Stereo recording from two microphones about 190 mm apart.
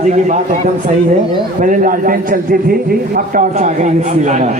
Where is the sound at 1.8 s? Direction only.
45° right (ahead or behind).